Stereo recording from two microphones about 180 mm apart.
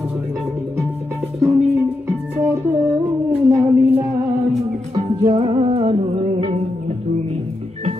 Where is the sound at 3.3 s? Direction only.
15° right (ahead or behind).